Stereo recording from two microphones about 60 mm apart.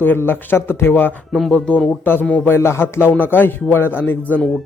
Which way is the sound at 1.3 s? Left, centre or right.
Centre.